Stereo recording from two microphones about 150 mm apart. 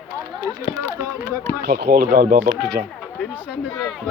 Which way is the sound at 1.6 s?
75° right (ahead or behind).